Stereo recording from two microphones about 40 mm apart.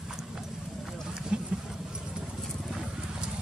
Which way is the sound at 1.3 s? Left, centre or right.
Right.